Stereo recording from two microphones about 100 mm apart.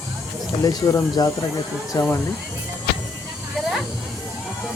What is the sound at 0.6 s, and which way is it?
Speech, 35° left (ahead or behind).